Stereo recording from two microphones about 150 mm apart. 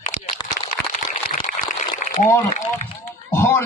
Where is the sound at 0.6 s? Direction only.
60° left (ahead or behind).